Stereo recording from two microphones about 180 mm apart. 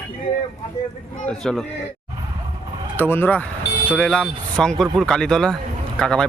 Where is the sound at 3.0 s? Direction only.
10° left (ahead or behind).